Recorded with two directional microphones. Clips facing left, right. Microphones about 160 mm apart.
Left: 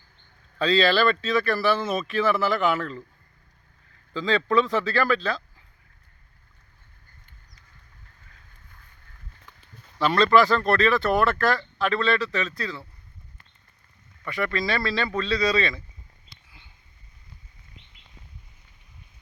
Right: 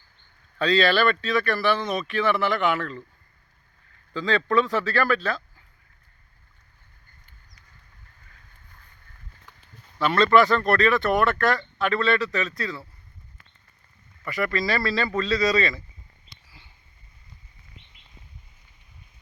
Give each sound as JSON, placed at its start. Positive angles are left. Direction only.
{"t": 0.6, "sound": "speech", "side_deg": 0}
{"t": 4.2, "sound": "speech", "side_deg": 0}
{"t": 10.0, "sound": "speech", "side_deg": 0}
{"t": 14.3, "sound": "speech", "side_deg": 0}